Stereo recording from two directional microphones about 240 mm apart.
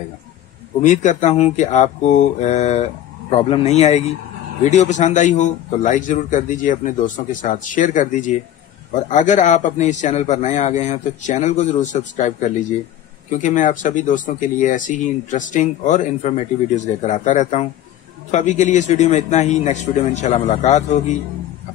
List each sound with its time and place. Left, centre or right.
0.8 s speech: left